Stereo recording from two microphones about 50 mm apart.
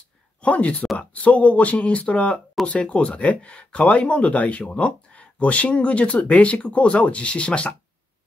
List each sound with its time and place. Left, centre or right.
0.4 s speech: left